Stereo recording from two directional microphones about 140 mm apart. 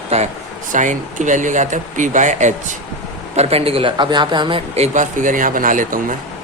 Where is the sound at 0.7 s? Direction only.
65° right (ahead or behind).